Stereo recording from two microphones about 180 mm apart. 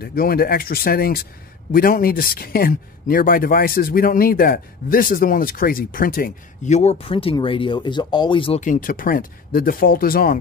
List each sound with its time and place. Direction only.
0.0 s speech: 55° left (ahead or behind); by 8.5 s 30° left (ahead or behind)
8.5 s speech: 45° left (ahead or behind)